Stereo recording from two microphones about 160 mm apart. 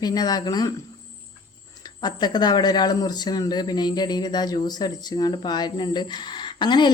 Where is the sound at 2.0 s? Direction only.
25° left (ahead or behind).